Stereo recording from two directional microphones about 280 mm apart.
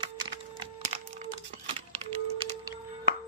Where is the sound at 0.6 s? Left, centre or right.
Centre.